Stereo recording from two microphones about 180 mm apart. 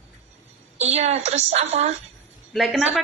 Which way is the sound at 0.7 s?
35° right (ahead or behind).